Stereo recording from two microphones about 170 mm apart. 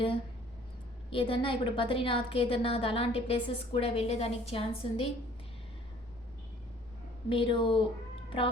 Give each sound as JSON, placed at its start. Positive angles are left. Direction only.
{"t": 1.1, "sound": "a woman's voice", "side_deg": 30}
{"t": 7.3, "sound": "a woman's voice", "side_deg": 30}